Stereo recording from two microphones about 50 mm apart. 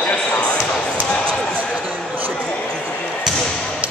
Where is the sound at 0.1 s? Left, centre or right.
Left.